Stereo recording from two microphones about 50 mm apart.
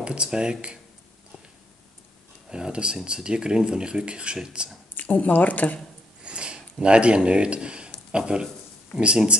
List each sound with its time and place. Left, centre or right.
0.0 s speech: centre
2.5 s speech: centre
4.9 s speech: left
6.2 s a sound: centre
7.2 s speech: right